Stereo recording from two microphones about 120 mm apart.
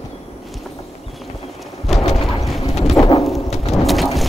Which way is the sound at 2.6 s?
60° left (ahead or behind).